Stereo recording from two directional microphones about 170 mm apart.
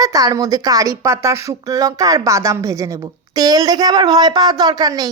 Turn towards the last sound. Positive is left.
turn(degrees=-20)  # may be behind; listen again after turning